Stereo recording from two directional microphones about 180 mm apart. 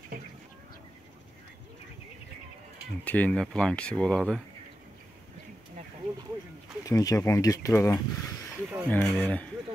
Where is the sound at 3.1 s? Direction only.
5° left (ahead or behind).